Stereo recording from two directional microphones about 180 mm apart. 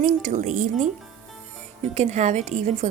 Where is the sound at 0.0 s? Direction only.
45° right (ahead or behind).